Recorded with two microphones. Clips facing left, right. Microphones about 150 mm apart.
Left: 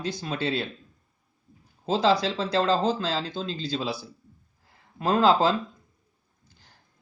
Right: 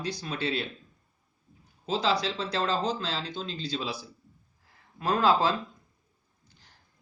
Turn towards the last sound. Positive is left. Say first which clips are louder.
# left 3 dB
turn(degrees=25)  # may be behind; listen again after turning